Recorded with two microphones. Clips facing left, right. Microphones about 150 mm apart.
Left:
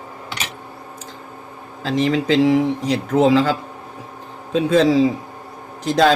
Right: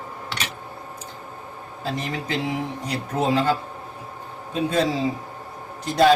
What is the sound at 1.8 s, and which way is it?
A man's voice, 90° left.